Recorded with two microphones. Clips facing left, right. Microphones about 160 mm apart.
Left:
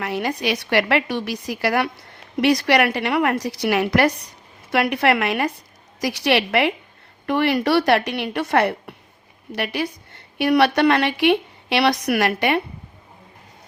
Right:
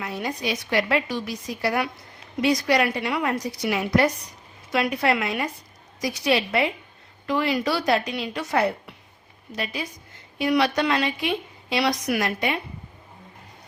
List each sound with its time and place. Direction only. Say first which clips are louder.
0.0 s a woman's voice: left 5 dB; 75° left (ahead or behind)
7.3 s a woman's voice: left 5 dB; 65° left (ahead or behind)